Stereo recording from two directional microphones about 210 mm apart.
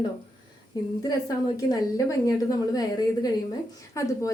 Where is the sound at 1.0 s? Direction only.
15° left (ahead or behind).